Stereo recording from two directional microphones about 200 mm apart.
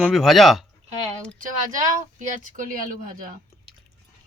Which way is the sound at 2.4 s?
40° right (ahead or behind).